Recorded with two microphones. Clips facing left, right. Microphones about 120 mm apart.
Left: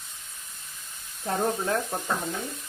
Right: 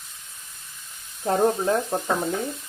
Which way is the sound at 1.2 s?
20° right (ahead or behind).